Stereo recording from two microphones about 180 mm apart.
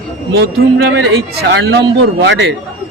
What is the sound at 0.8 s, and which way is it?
A man's voice, 75° right (ahead or behind).